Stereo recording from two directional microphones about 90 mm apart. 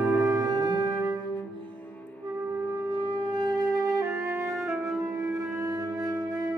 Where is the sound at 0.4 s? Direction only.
55° right (ahead or behind).